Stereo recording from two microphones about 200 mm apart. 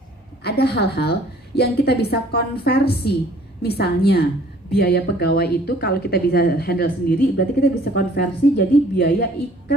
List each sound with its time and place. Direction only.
0.4 s speech: 55° left (ahead or behind)